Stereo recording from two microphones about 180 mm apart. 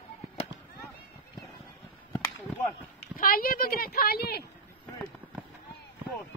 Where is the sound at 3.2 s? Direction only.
55° left (ahead or behind).